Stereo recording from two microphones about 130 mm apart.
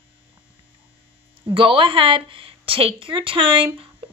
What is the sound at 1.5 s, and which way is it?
A woman's voice, 40° right (ahead or behind).